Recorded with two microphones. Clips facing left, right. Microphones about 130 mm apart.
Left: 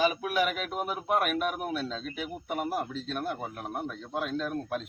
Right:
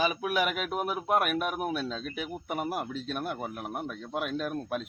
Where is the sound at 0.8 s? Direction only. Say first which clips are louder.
Right 1 dB; 5° right (ahead or behind).